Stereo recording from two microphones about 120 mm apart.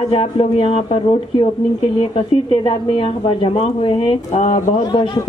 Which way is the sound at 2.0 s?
50° left (ahead or behind).